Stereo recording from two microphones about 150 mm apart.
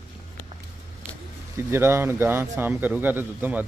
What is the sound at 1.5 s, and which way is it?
Speech, 15° right (ahead or behind).